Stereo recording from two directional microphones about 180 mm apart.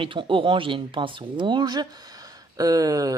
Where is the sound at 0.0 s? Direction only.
30° right (ahead or behind).